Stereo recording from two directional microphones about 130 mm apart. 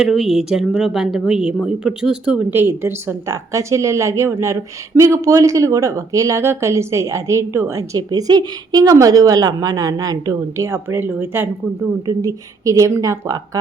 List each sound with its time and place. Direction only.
0.0 s a woman's voice: centre (ahead or behind); by 13.6 s 25° right (ahead or behind)